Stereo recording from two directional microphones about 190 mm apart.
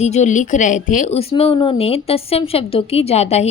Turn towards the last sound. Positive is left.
turn(degrees=35)  # may be behind; listen again after turning